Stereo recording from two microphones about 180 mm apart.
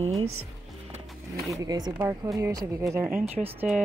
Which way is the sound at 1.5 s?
20° right (ahead or behind).